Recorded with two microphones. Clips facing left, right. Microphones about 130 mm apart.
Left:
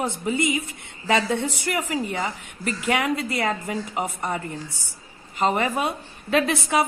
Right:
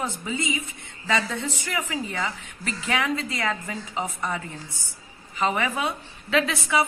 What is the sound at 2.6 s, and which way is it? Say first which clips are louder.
Speech: left 4 dB; 60° left (ahead or behind).